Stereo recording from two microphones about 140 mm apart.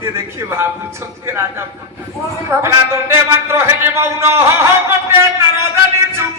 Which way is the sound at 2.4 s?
20° right (ahead or behind).